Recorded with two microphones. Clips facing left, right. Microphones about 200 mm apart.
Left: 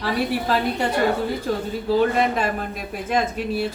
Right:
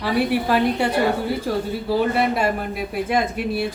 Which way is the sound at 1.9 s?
10° right (ahead or behind).